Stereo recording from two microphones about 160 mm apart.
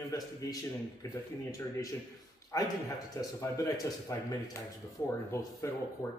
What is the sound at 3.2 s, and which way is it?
A man's voice, 20° left (ahead or behind).